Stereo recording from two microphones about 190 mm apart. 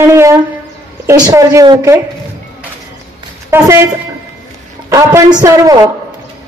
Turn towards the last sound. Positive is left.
turn(degrees=-20)  # may be behind; listen again after turning